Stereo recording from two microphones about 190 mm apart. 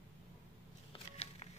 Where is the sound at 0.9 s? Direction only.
35° left (ahead or behind).